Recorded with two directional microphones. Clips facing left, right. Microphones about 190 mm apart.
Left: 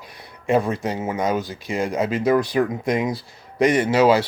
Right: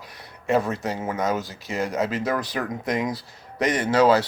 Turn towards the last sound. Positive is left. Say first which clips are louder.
# left 2 dB
turn(degrees=10)  # may be behind; listen again after turning